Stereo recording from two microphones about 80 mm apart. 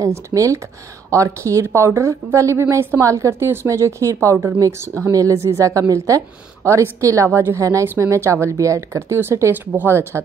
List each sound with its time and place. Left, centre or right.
0.0 s a woman's voice: right
3.0 s a woman's voice: right